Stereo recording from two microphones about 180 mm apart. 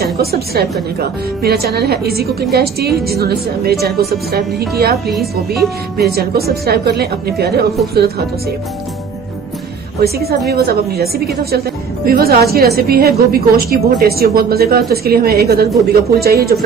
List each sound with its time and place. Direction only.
0.0 s a woman's voice: 60° right (ahead or behind)
5.1 s a woman's voice: centre (ahead or behind)
5.9 s a woman's voice: 60° right (ahead or behind)
10.0 s a woman's voice: 60° right (ahead or behind)